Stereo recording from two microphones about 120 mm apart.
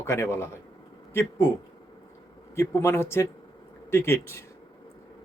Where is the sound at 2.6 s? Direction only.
25° left (ahead or behind).